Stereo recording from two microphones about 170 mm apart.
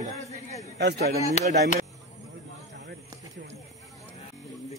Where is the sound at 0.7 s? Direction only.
80° right.